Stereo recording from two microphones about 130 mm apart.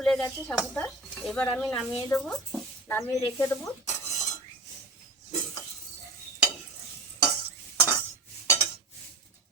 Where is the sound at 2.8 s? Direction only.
20° left (ahead or behind).